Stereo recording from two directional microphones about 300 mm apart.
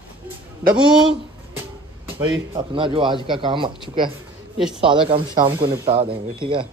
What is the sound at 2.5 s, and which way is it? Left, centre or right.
Speech, centre.